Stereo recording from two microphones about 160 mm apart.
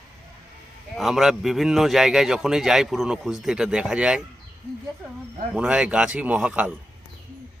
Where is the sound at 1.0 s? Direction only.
Centre (ahead or behind).